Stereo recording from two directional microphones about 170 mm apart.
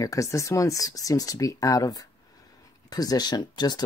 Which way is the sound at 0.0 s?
20° left (ahead or behind).